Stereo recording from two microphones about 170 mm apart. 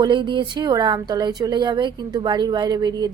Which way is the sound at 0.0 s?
30° right (ahead or behind).